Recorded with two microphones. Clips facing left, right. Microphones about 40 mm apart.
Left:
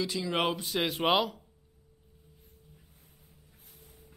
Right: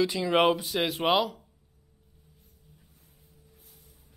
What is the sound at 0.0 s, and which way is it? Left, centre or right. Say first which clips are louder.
Speech: right 6 dB; centre.